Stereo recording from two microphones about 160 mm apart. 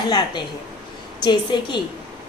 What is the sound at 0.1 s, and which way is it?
A woman's voice, 25° left (ahead or behind).